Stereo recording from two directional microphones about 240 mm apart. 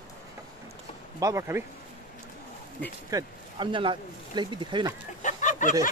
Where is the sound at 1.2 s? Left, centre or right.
Centre.